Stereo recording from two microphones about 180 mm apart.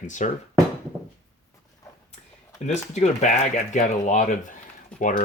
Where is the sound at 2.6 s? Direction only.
40° left (ahead or behind).